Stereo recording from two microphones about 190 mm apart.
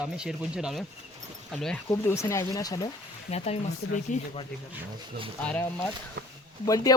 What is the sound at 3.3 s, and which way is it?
Speech, 35° left (ahead or behind).